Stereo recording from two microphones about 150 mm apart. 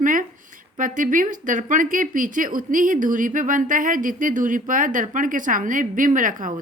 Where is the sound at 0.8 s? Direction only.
65° right (ahead or behind).